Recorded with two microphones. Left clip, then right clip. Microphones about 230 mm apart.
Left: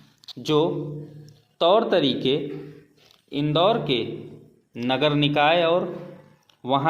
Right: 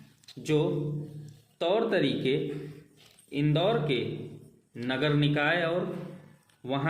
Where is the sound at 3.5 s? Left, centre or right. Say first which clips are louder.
Left 8 dB; left.